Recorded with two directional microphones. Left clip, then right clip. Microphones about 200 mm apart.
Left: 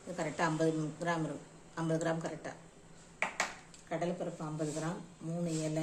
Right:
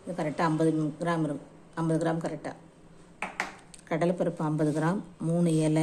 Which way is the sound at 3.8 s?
35° right (ahead or behind).